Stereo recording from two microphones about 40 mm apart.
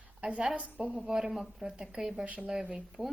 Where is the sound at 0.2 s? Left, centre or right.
Right.